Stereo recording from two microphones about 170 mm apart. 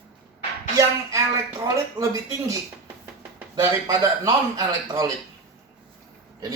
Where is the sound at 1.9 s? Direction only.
20° right (ahead or behind).